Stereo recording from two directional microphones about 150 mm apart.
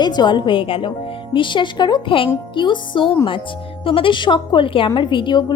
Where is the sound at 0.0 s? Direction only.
30° left (ahead or behind).